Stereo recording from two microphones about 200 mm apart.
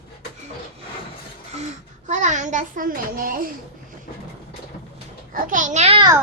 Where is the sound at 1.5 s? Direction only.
35° right (ahead or behind).